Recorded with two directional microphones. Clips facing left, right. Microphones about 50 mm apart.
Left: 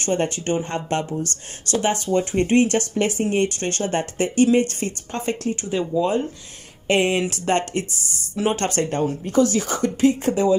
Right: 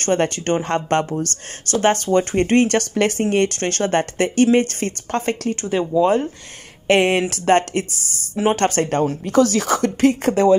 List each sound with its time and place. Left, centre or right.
0.0 s speech: right
8.8 s speech: right